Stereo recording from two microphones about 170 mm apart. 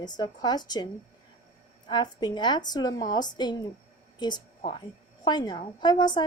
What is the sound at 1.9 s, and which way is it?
A woman's voice, 25° left (ahead or behind).